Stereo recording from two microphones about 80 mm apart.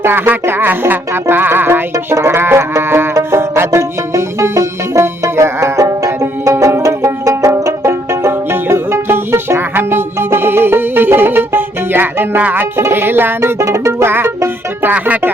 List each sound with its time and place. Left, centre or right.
0.0 s music: right
14.9 s speech: centre